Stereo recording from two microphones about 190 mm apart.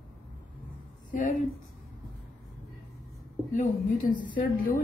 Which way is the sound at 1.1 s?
45° left (ahead or behind).